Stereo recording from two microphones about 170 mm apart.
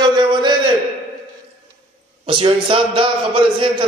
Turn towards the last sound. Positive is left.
turn(degrees=-30)  # may be behind; listen again after turning